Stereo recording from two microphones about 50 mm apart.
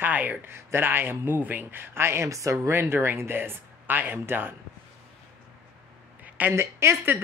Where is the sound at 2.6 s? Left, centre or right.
Right.